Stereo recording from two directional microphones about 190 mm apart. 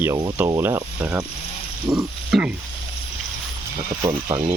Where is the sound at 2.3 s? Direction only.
Centre (ahead or behind).